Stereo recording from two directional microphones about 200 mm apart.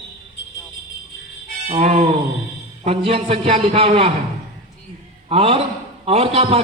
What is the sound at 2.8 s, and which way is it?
A man's voice, 30° right (ahead or behind).